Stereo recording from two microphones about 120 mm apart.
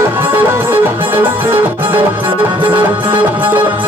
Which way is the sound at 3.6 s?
40° right (ahead or behind).